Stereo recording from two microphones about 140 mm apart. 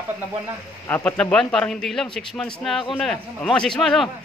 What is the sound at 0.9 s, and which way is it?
Speech, 10° left (ahead or behind).